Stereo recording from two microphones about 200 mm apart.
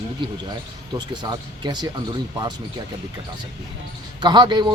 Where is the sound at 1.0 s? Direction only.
20° right (ahead or behind).